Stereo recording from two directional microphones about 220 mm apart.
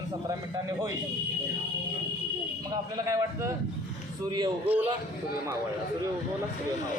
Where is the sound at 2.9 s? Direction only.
15° right (ahead or behind).